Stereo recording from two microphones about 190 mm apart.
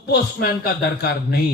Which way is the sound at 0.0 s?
55° left (ahead or behind).